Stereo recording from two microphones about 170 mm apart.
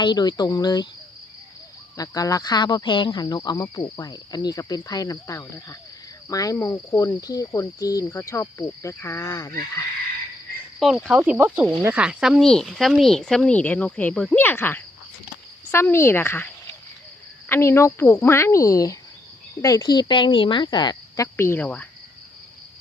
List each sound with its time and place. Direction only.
0.0 s speech: 25° left (ahead or behind)
2.0 s speech: 20° left (ahead or behind)
10.8 s speech: centre (ahead or behind)
17.5 s speech: 15° left (ahead or behind)
21.3 s speech: 15° left (ahead or behind)